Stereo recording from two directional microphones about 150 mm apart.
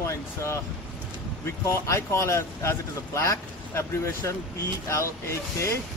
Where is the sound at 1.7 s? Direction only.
20° left (ahead or behind).